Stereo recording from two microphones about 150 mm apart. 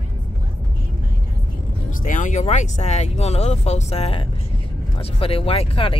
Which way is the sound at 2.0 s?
60° left (ahead or behind).